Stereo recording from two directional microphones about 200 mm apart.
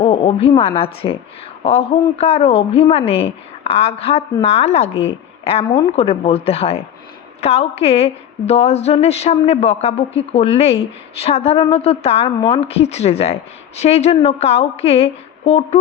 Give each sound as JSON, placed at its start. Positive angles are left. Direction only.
{"t": 0.0, "sound": "a woman's voice", "side_deg": 30}